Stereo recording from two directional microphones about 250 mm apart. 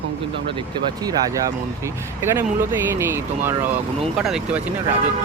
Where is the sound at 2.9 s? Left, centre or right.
Centre.